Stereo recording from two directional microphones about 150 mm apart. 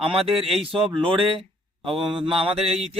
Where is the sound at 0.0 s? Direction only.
40° right (ahead or behind).